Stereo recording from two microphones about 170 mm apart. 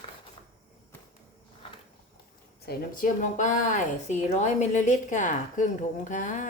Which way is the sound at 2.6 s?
60° left (ahead or behind).